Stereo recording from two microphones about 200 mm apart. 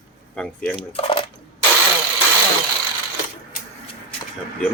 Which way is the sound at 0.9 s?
30° left (ahead or behind).